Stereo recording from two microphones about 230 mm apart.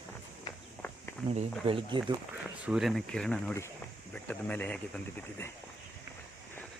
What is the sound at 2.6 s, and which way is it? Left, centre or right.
Speech, centre.